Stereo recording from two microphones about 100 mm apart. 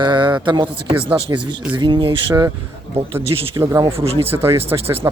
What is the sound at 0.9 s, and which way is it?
Speech, 65° right (ahead or behind).